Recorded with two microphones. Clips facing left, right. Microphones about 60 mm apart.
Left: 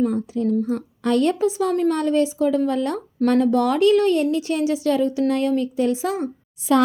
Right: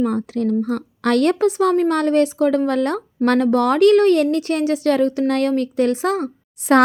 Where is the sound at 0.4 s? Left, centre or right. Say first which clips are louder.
Right 1 dB; right.